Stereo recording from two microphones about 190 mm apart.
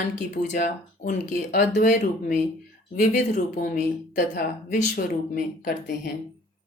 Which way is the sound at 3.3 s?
40° left (ahead or behind).